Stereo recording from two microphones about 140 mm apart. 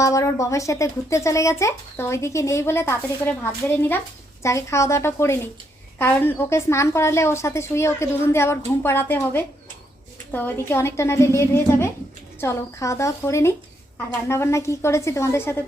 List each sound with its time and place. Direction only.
0.0 s speech: 25° left (ahead or behind)